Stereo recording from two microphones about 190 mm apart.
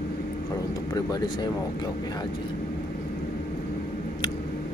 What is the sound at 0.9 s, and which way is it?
Speech, 20° left (ahead or behind).